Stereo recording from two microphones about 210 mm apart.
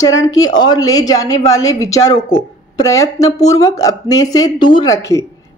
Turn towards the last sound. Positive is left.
turn(degrees=15)  # may be behind; listen again after turning